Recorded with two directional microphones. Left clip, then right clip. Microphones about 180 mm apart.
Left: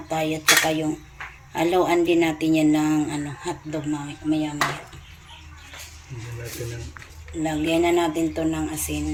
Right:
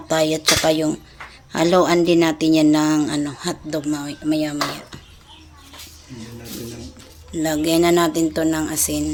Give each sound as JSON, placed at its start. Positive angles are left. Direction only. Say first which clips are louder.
{"t": 0.1, "sound": "speech", "louder": "right 2 dB", "side_deg": -55}
{"t": 1.5, "sound": "speech", "louder": "right 4 dB", "side_deg": -50}
{"t": 7.4, "sound": "speech", "louder": "right 4 dB", "side_deg": -50}